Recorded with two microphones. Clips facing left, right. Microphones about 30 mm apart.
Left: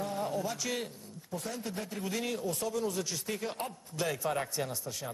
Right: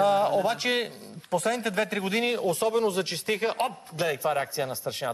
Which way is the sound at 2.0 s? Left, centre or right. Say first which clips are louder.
Right 5 dB; right.